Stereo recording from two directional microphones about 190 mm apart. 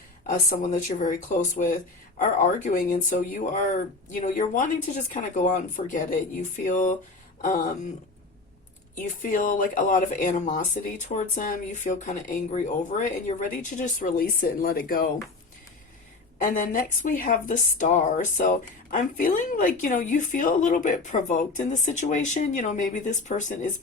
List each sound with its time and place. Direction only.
0.3 s speech: 45° left (ahead or behind)
9.0 s speech: 45° left (ahead or behind)
16.4 s a woman's voice: 45° left (ahead or behind)